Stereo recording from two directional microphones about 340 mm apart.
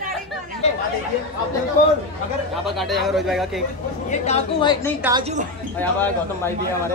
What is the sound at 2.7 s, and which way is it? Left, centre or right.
Speech, centre.